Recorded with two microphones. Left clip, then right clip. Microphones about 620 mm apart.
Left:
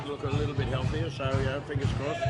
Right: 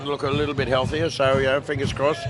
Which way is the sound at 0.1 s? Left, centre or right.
Right.